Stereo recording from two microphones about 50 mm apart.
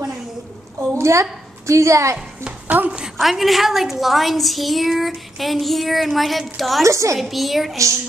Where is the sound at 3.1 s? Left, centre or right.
Centre.